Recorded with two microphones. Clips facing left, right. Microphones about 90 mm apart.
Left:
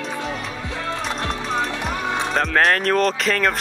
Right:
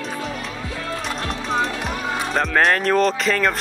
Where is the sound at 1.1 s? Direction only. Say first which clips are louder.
Left 1 dB; 30° left (ahead or behind).